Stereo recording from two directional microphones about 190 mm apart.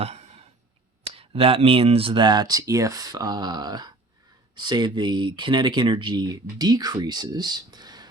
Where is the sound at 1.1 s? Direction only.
30° right (ahead or behind).